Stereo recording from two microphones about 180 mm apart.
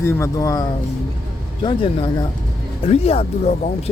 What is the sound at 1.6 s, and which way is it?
A man's voice, 30° left (ahead or behind).